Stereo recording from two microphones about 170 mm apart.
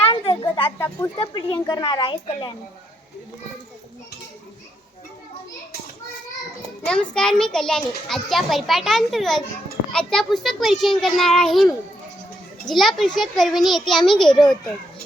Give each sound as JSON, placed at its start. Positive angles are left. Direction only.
{"t": 0.0, "sound": "a sound", "side_deg": 30}
{"t": 0.8, "sound": "speech", "side_deg": 15}
{"t": 1.2, "sound": "a woman's voice", "side_deg": 30}
{"t": 6.8, "sound": "a child's voice", "side_deg": 5}